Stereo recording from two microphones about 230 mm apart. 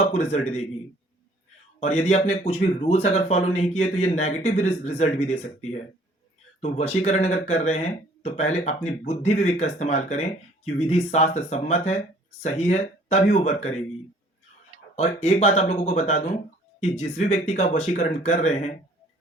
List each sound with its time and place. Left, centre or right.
0.1 s speech: left
1.8 s speech: left
14.9 s speech: left